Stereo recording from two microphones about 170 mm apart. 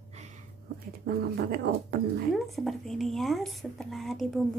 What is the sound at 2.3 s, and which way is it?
Speech, centre (ahead or behind).